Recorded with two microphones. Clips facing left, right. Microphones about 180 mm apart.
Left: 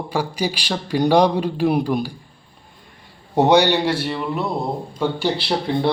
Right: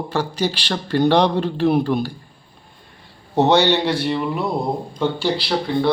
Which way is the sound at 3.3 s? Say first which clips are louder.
Left 1 dB; 15° left (ahead or behind).